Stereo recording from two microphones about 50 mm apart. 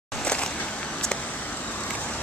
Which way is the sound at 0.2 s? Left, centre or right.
Left.